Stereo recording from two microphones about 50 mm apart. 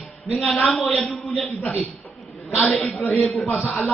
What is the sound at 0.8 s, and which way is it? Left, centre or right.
Speech, centre.